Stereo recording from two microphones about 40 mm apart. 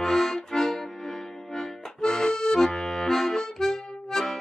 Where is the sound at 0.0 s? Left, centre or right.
Centre.